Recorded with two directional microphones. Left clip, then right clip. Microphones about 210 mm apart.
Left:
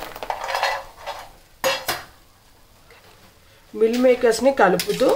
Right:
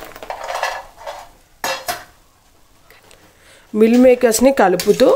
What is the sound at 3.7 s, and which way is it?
Speech, 45° right (ahead or behind).